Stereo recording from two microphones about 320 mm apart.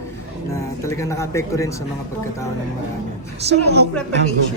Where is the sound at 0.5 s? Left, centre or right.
Centre.